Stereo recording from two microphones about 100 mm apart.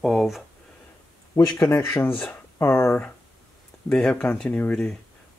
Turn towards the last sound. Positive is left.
turn(degrees=10)  # may be behind; listen again after turning